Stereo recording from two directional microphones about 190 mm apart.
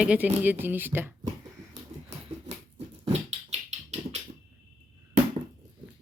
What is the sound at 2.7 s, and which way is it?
Dog, 35° right (ahead or behind).